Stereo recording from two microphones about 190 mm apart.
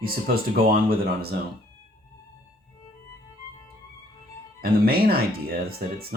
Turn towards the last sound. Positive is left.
turn(degrees=-55)  # may be behind; listen again after turning